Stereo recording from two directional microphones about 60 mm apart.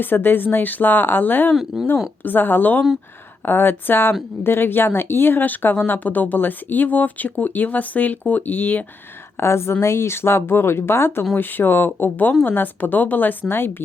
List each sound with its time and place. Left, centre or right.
0.0 s speech: left
1.7 s a woman's voice: centre
2.2 s speech: left
9.4 s speech: left
12.3 s speech: left